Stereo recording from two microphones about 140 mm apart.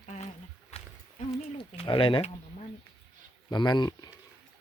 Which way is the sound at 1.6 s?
35° left (ahead or behind).